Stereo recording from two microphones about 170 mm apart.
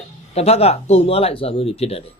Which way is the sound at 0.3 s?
35° left (ahead or behind).